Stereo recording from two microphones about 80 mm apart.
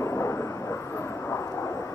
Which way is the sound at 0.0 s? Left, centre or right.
Left.